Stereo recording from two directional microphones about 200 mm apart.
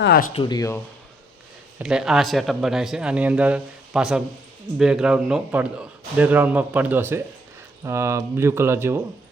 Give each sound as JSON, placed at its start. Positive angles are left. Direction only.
{"t": 0.0, "sound": "speech", "side_deg": 50}
{"t": 0.3, "sound": "speech", "side_deg": 20}
{"t": 1.8, "sound": "a man's voice", "side_deg": -5}